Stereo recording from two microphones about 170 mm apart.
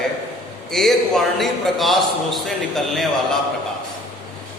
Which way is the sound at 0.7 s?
Centre (ahead or behind).